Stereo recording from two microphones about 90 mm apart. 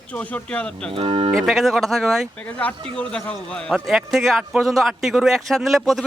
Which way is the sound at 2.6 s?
15° left (ahead or behind).